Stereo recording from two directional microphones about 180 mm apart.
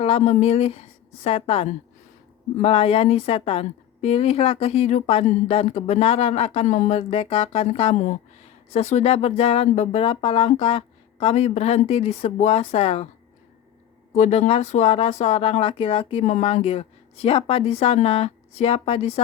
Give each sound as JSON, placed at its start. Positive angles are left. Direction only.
{"t": 0.0, "sound": "a woman's voice", "side_deg": 35}
{"t": 14.1, "sound": "a woman's voice", "side_deg": 35}